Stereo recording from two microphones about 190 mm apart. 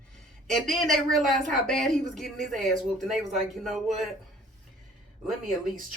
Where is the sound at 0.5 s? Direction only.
Centre (ahead or behind).